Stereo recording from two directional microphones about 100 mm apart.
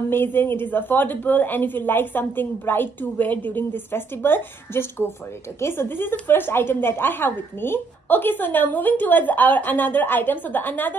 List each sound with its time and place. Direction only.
0.1 s a woman's voice: 20° left (ahead or behind)